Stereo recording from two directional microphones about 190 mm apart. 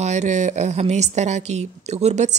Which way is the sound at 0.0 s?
35° right (ahead or behind).